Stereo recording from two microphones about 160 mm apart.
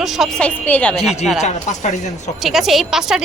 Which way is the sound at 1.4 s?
45° left (ahead or behind).